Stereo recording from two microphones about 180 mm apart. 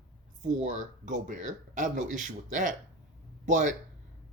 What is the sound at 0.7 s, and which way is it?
Speech, 45° right (ahead or behind).